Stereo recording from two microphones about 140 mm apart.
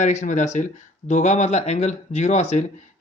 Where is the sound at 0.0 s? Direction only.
60° left (ahead or behind).